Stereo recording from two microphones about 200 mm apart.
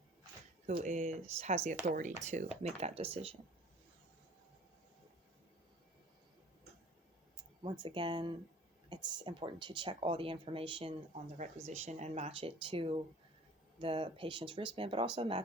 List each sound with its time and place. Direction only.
0.8 s speech: 35° right (ahead or behind)
7.6 s speech: 25° right (ahead or behind)